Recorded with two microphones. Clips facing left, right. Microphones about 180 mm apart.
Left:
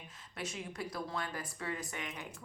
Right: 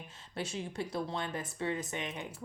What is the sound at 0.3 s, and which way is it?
Speech, 30° right (ahead or behind).